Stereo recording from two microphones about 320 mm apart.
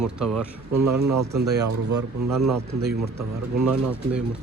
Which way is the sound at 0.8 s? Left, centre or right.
Right.